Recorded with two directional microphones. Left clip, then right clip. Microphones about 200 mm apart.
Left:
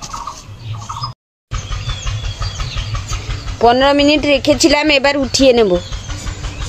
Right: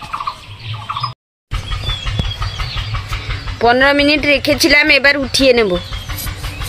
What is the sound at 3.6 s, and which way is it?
Speech, 30° left (ahead or behind).